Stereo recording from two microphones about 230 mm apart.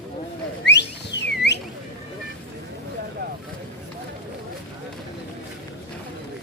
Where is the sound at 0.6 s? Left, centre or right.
Left.